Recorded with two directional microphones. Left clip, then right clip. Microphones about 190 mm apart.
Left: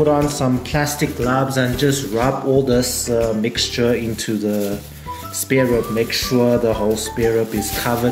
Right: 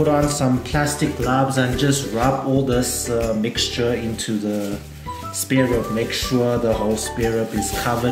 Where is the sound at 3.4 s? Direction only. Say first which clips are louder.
Left 3 dB; 30° left (ahead or behind).